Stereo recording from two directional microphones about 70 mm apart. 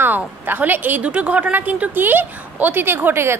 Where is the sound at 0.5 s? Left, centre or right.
Right.